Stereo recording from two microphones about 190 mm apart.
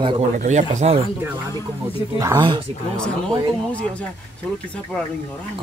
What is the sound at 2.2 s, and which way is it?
Speech, 20° right (ahead or behind).